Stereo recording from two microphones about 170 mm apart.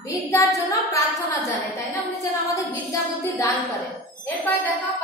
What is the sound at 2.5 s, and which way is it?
Speech, 20° left (ahead or behind).